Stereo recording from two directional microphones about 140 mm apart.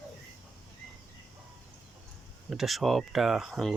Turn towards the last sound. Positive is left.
turn(degrees=0)  # may be behind; listen again after turning